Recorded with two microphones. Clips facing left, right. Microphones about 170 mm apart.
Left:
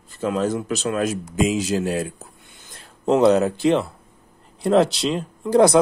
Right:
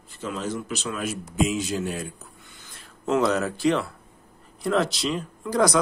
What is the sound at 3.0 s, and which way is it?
Speech, 30° left (ahead or behind).